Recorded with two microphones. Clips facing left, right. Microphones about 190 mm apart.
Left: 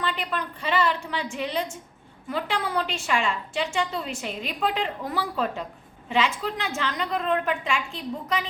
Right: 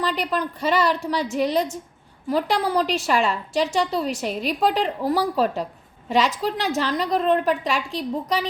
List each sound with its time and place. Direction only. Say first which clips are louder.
0.0 s a woman's voice: right 5 dB; 40° right (ahead or behind)